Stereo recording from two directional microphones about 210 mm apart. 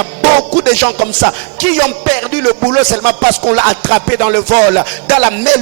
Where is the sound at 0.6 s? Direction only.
10° right (ahead or behind).